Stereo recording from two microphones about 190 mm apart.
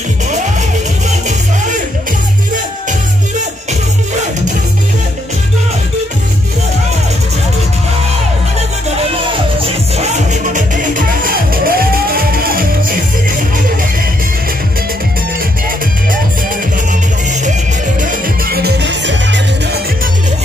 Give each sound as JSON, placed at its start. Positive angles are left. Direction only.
{"t": 9.6, "sound": "music", "side_deg": -35}
{"t": 17.3, "sound": "music", "side_deg": -40}
{"t": 18.0, "sound": "music", "side_deg": -50}